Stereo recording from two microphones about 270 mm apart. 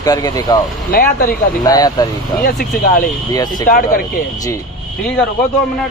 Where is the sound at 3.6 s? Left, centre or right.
Left.